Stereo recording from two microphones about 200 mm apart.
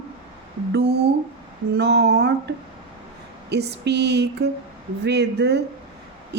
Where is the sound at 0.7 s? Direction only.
55° right (ahead or behind).